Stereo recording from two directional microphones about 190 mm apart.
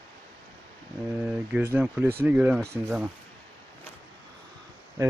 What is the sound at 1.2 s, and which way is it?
Speech, 10° right (ahead or behind).